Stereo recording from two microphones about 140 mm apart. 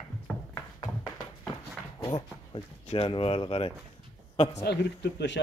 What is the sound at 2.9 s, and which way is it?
Speech, 40° left (ahead or behind).